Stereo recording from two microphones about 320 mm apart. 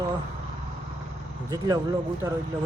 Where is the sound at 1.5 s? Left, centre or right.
Centre.